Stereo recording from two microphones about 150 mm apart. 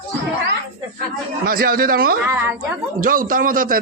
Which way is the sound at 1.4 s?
75° right (ahead or behind).